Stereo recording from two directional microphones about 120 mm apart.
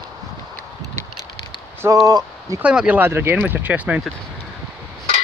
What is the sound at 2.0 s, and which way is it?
Speech, 30° right (ahead or behind).